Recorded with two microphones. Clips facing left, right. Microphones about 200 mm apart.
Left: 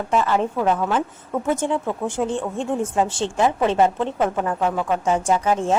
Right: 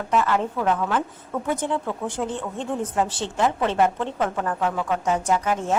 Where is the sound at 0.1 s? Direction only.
25° left (ahead or behind).